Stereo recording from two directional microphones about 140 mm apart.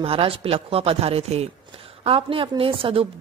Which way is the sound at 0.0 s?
40° right (ahead or behind).